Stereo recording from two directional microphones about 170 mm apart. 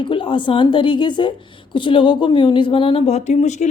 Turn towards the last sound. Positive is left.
turn(degrees=45)  # may be behind; listen again after turning